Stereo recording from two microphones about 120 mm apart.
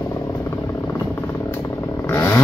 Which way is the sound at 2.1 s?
20° left (ahead or behind).